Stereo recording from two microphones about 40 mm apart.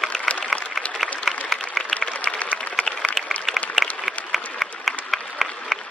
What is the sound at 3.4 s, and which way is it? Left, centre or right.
Applause, centre.